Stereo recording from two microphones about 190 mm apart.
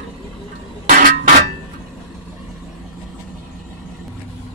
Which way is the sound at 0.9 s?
45° right (ahead or behind).